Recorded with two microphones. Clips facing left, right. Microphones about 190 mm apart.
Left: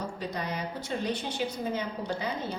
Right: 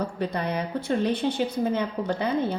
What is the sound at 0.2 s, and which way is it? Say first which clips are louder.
A woman's voice: right 6 dB; 60° right (ahead or behind).